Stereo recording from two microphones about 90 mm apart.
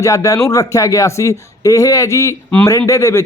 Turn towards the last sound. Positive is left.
turn(degrees=35)  # may be behind; listen again after turning